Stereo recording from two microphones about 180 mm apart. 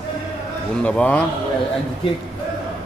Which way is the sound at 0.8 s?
5° left (ahead or behind).